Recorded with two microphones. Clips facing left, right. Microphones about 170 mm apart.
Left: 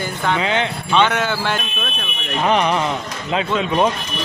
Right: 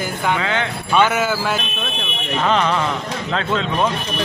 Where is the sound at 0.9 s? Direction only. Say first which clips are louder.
Right 1 dB; 5° right (ahead or behind).